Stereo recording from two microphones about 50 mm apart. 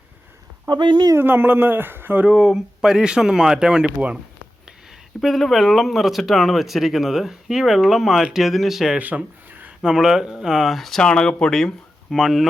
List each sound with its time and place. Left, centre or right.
1.2 s speech: right
2.4 s speech: centre
5.2 s speech: centre
9.0 s speech: right
9.8 s speech: centre
12.1 s speech: centre